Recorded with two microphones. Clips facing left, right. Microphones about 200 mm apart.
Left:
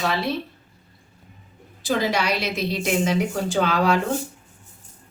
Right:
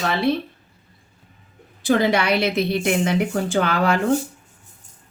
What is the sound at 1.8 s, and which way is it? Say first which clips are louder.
A woman's voice: right 4 dB; 60° right (ahead or behind).